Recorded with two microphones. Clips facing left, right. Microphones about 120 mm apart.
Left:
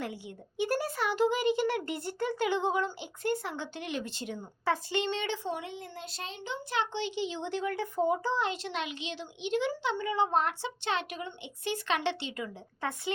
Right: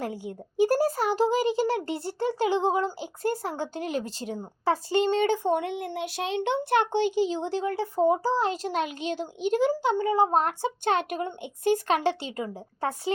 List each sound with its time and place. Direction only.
0.0 s a child's voice: 45° right (ahead or behind)